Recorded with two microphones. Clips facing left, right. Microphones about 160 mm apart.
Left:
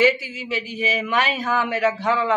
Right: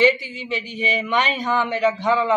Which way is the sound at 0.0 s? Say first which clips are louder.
Right 1 dB; 5° left (ahead or behind).